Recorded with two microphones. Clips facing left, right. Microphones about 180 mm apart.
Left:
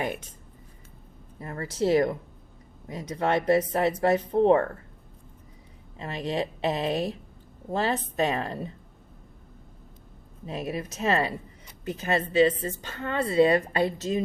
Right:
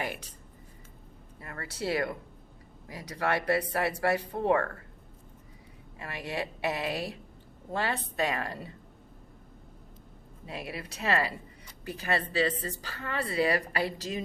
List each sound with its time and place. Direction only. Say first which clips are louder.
1.4 s a woman's voice: left 9 dB; 25° left (ahead or behind)
6.0 s a woman's voice: left 6 dB; 25° left (ahead or behind)
10.4 s a woman's voice: left 7 dB; 20° left (ahead or behind)